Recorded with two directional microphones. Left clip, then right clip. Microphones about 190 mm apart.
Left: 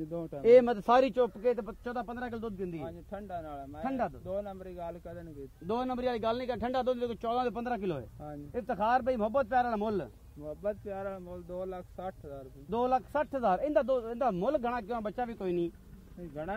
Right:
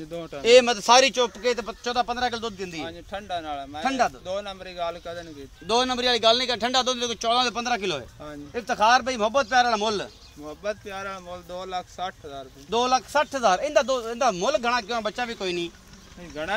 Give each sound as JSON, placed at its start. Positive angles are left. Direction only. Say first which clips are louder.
{"t": 0.1, "sound": "speech", "louder": "right 5 dB", "side_deg": 30}
{"t": 5.7, "sound": "a man's voice", "louder": "right 10 dB", "side_deg": 50}